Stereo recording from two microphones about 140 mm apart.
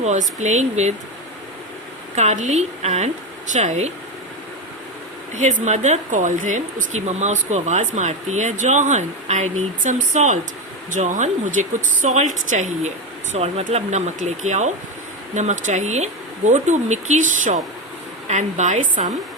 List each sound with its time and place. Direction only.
0.0 s speech: 55° right (ahead or behind)
2.1 s speech: 55° right (ahead or behind)
5.3 s speech: 60° right (ahead or behind)
13.3 s speech: 50° right (ahead or behind)